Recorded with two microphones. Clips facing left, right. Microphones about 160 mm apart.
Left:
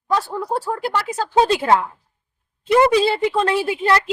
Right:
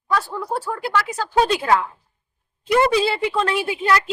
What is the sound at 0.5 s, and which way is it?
A woman's voice, 35° left (ahead or behind).